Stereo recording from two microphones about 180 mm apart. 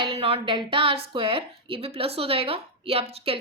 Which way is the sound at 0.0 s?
30° right (ahead or behind).